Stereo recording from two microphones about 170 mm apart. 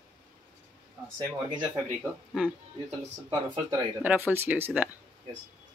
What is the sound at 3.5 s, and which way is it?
Speech, 30° right (ahead or behind).